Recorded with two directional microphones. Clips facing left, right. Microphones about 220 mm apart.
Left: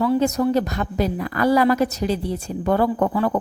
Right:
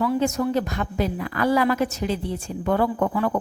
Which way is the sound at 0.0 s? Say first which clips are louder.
Left 3 dB; 35° left (ahead or behind).